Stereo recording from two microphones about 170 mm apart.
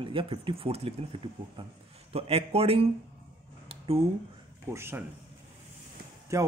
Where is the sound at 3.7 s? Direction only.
35° right (ahead or behind).